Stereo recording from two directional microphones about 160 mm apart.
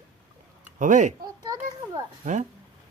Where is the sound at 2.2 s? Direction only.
50° right (ahead or behind).